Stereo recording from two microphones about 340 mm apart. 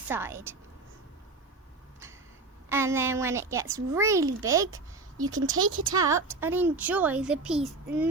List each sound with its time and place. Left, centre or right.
0.1 s a child's voice: centre
2.6 s a child's voice: centre
5.5 s speech: right
6.0 s a child's voice: centre